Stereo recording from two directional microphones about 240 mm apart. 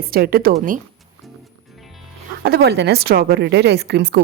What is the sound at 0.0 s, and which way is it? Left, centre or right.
Speech, right.